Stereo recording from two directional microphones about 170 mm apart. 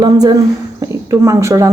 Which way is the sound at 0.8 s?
20° right (ahead or behind).